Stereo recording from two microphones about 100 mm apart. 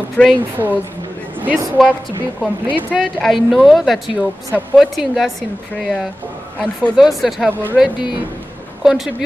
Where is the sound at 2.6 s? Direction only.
15° right (ahead or behind).